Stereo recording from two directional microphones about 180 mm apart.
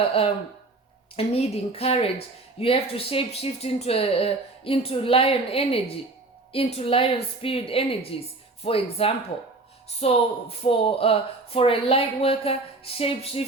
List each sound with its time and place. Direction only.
1.1 s a woman's voice: 35° left (ahead or behind)